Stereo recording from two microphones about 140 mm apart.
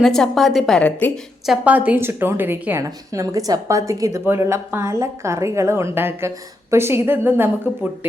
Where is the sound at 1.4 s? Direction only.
5° right (ahead or behind).